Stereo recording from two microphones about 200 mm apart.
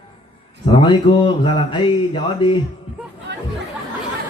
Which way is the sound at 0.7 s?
25° left (ahead or behind).